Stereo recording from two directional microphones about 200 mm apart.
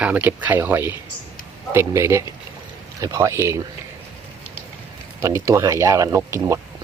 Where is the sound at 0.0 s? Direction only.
10° right (ahead or behind).